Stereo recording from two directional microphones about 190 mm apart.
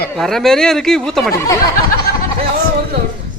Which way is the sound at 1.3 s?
15° left (ahead or behind).